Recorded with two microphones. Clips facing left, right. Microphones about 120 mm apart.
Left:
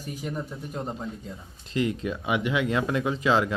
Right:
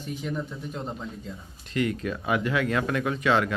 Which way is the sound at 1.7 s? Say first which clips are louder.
Even; 25° left (ahead or behind).